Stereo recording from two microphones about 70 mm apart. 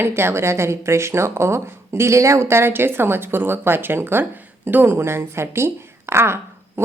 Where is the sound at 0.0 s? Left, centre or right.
Right.